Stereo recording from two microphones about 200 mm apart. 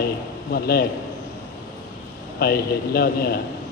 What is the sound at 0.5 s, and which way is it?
Speech, 50° left (ahead or behind).